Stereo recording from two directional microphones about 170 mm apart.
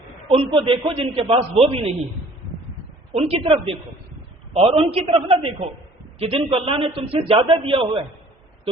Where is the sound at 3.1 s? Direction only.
35° right (ahead or behind).